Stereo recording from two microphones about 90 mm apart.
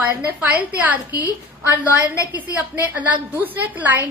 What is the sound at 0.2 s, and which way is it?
A woman's voice, 20° right (ahead or behind).